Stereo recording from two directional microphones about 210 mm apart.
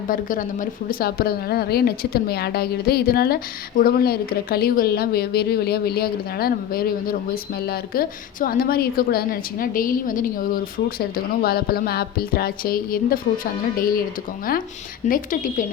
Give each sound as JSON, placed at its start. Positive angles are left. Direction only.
{"t": 0.1, "sound": "a woman's voice", "side_deg": 40}
{"t": 15.0, "sound": "a woman's voice", "side_deg": 40}